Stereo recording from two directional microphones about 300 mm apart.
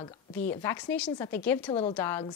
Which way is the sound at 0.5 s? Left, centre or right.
Centre.